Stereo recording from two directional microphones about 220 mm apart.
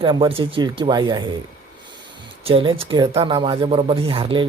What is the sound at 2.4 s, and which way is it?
Speech, 25° right (ahead or behind).